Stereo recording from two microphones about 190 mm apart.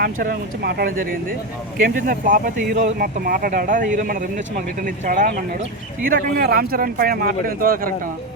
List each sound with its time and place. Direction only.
0.0 s speech: 55° right (ahead or behind)